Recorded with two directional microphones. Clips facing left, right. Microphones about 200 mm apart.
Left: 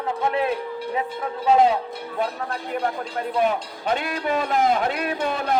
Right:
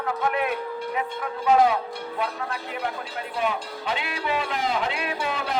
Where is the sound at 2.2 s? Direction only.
40° left (ahead or behind).